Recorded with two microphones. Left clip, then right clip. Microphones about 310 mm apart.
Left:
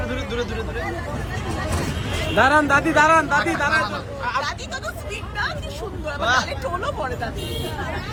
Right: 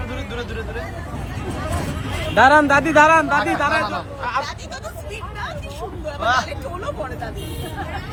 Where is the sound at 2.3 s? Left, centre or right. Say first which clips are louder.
Right 4 dB; right.